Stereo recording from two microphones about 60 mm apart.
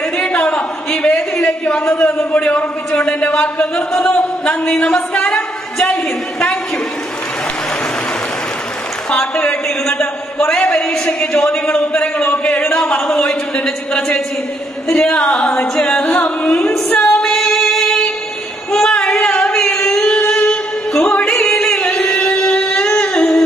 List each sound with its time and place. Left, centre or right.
0.5 s a sound: centre
2.1 s a man's voice: left
9.8 s a man's voice: centre
13.9 s a man's voice: centre
16.7 s female singing: centre
19.0 s singing: centre
20.2 s music: centre
22.9 s singing: centre